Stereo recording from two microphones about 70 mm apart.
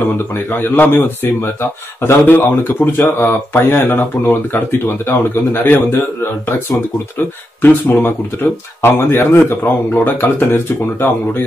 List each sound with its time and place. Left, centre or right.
0.3 s speech: left
7.2 s speech: left